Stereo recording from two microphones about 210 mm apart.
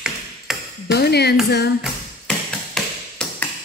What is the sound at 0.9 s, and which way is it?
Music, 50° left (ahead or behind).